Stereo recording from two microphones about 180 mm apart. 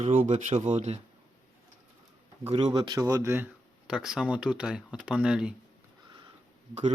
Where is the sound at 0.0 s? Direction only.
40° right (ahead or behind).